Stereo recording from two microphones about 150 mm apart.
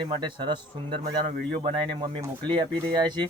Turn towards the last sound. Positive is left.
turn(degrees=-30)  # may be behind; listen again after turning